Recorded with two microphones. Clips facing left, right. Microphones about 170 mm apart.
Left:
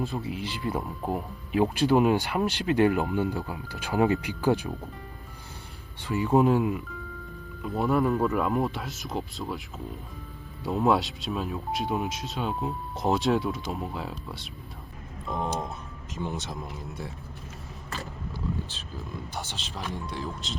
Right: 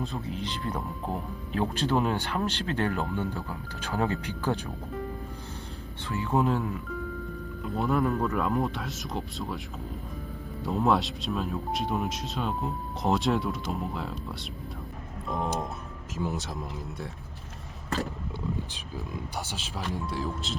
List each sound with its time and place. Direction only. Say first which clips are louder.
0.0 s speech: left 2 dB; centre (ahead or behind)
6.1 s speech: left 5 dB; 15° left (ahead or behind)
7.6 s speech: left 2 dB; centre (ahead or behind)
10.6 s speech: left 1 dB; centre (ahead or behind)
19.7 s speech: right 2 dB; 5° right (ahead or behind)